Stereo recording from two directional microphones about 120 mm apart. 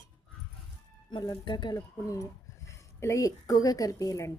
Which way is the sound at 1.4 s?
40° left (ahead or behind).